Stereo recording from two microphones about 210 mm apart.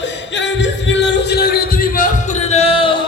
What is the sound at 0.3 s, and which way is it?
Music, 60° left (ahead or behind).